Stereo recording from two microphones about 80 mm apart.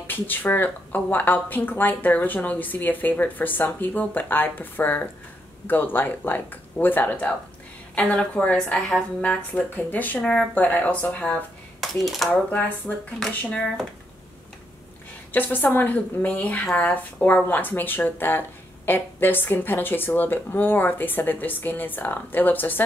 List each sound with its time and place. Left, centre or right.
0.0 s a woman's voice: left
11.8 s speech: centre
12.3 s speech: left
13.5 s a woman's voice: centre
15.3 s speech: left